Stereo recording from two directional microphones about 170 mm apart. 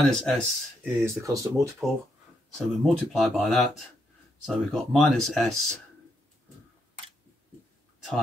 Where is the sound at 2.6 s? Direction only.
Centre (ahead or behind).